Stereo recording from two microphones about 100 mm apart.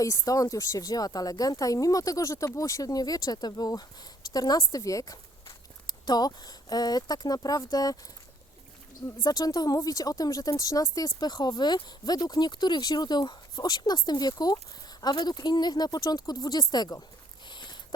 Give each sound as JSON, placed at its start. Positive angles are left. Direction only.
{"t": 0.0, "sound": "a woman's voice", "side_deg": 35}
{"t": 9.0, "sound": "speech", "side_deg": 40}
{"t": 17.5, "sound": "a sound", "side_deg": 50}